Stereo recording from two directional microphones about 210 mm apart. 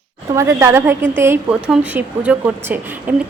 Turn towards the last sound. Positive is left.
turn(degrees=-10)  # may be behind; listen again after turning